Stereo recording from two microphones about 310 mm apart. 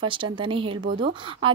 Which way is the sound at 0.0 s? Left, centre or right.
Centre.